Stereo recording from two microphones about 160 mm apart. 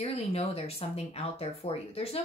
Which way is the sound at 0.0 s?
40° left (ahead or behind).